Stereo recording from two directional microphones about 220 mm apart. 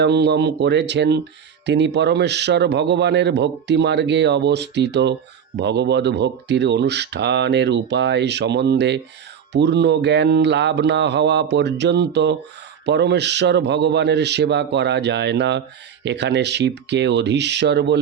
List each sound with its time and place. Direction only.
0.0 s a man's voice: 50° right (ahead or behind)